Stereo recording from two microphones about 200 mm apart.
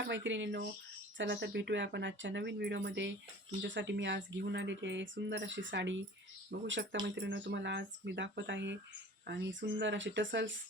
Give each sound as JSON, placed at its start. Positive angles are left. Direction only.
{"t": 0.0, "sound": "speech", "side_deg": -60}
{"t": 6.5, "sound": "speech", "side_deg": -50}
{"t": 7.2, "sound": "speech", "side_deg": -60}